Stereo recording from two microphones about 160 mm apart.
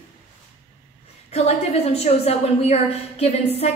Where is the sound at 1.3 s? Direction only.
40° left (ahead or behind).